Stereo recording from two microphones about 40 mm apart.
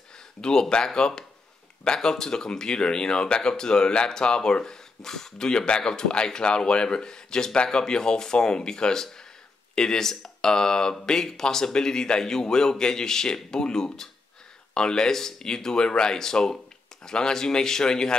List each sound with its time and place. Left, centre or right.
0.4 s speech: centre
5.5 s speech: left